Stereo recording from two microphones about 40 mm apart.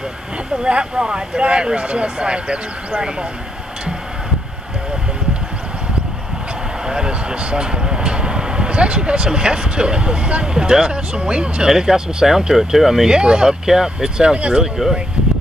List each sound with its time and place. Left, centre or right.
0.7 s speech: right
6.9 s speech: right
11.6 s speech: centre
14.6 s speech: centre